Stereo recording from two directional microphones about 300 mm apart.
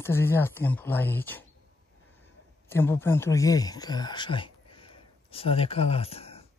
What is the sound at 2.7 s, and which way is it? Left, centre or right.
Speech, centre.